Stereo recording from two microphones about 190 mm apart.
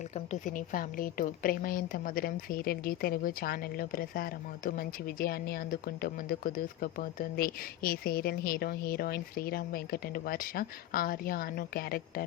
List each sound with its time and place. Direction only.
0.3 s a woman's voice: 45° left (ahead or behind)